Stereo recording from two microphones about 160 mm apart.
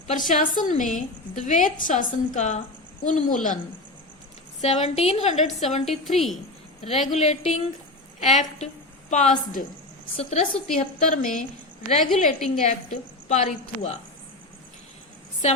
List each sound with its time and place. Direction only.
0.3 s a woman's voice: 55° left (ahead or behind)
4.6 s a woman's voice: 45° left (ahead or behind)
5.9 s a woman's voice: centre (ahead or behind)
6.8 s a woman's voice: 40° left (ahead or behind)
10.2 s a woman's voice: 40° left (ahead or behind)
10.8 s a woman's voice: 50° left (ahead or behind)